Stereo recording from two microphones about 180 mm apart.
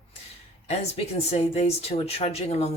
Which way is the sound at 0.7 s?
35° left (ahead or behind).